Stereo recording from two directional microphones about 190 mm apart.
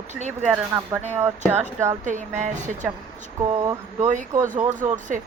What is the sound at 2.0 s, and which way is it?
Speech, 40° right (ahead or behind).